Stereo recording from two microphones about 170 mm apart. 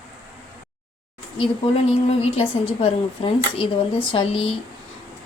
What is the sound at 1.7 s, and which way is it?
Speech, 35° left (ahead or behind).